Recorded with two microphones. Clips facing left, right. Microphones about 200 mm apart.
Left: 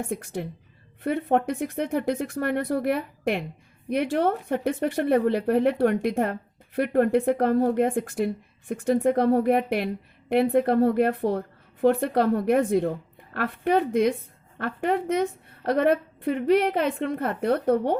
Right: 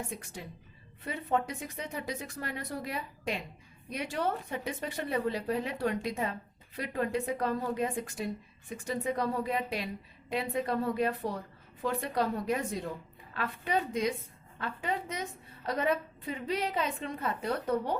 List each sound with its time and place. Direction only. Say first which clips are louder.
0.1 s a woman's voice: left 12 dB; 55° left (ahead or behind)